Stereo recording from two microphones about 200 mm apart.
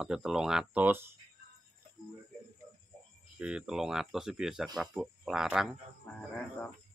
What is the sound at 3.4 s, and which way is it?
Speech, 5° right (ahead or behind).